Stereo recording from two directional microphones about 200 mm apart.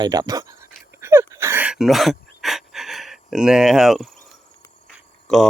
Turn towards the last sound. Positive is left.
turn(degrees=0)  # may be behind; listen again after turning